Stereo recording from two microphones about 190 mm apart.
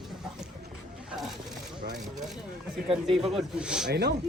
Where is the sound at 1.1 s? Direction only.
Centre (ahead or behind).